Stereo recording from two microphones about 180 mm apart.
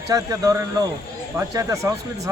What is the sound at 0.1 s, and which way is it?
Speech, 20° right (ahead or behind).